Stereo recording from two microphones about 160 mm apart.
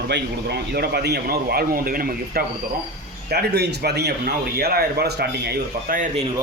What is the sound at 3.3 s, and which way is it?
Speech, 90° right.